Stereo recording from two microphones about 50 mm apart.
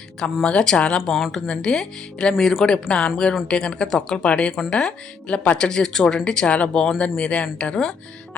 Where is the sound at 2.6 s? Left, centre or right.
Centre.